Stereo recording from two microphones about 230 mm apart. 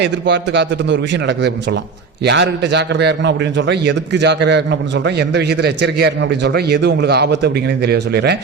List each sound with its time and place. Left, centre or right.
0.0 s a man's voice: right